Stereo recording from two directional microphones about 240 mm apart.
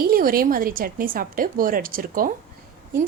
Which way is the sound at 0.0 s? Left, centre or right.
Right.